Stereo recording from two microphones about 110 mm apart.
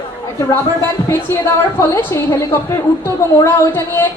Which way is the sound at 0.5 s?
25° left (ahead or behind).